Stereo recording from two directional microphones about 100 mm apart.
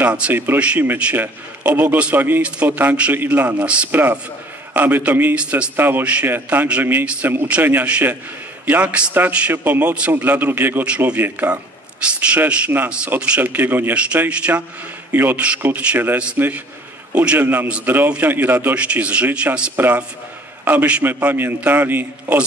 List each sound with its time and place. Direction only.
0.0 s a man's voice: 15° right (ahead or behind)